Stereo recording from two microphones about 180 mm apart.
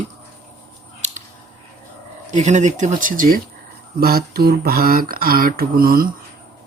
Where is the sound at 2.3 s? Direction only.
40° right (ahead or behind).